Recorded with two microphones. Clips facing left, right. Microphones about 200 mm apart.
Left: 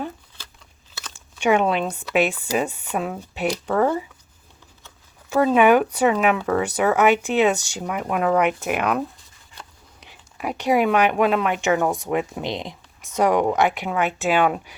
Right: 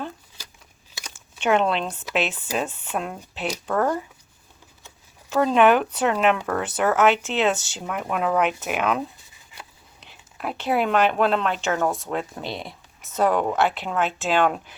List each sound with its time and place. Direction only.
1.4 s speech: 10° left (ahead or behind)
5.3 s speech: 10° left (ahead or behind)
10.0 s speech: 10° left (ahead or behind)